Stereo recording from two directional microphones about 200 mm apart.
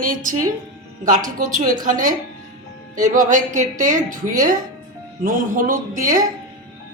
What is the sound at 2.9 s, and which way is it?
Speech, 40° right (ahead or behind).